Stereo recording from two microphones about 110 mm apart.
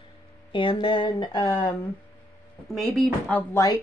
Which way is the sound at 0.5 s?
50° left (ahead or behind).